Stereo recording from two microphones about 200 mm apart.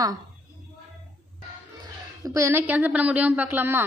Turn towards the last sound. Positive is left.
turn(degrees=-10)  # may be behind; listen again after turning